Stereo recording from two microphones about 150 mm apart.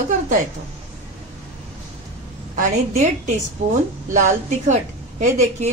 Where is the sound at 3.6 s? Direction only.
60° right (ahead or behind).